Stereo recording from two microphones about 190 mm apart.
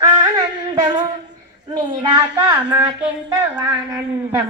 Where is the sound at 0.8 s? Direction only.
25° right (ahead or behind).